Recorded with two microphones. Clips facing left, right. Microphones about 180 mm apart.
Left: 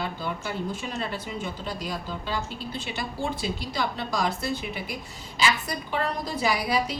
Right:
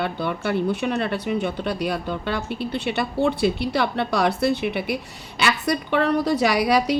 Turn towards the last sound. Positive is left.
turn(degrees=-70)  # may be behind; listen again after turning